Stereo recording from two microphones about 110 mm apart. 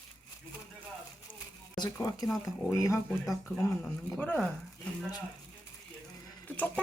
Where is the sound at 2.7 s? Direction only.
25° left (ahead or behind).